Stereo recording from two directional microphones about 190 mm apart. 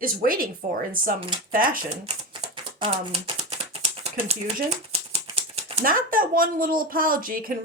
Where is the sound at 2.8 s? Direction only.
30° right (ahead or behind).